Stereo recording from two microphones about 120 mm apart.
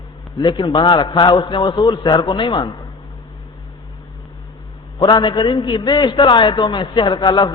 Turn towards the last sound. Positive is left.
turn(degrees=40)  # may be behind; listen again after turning